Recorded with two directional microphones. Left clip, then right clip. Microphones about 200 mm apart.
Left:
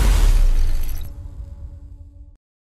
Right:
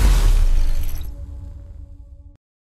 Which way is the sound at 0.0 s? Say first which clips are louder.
Even; centre (ahead or behind).